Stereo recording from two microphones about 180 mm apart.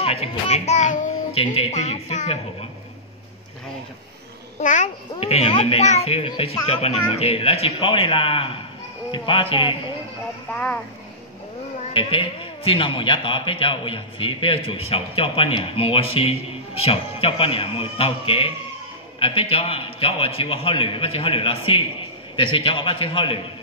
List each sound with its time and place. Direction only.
0.0 s a child's voice: 35° left (ahead or behind)
1.4 s a child's voice: 30° left (ahead or behind)
4.6 s a child's voice: 40° left (ahead or behind)
10.5 s a child's voice: 10° left (ahead or behind)
11.9 s a man's voice: 30° left (ahead or behind)